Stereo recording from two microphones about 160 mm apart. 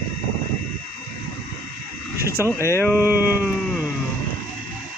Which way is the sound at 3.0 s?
10° right (ahead or behind).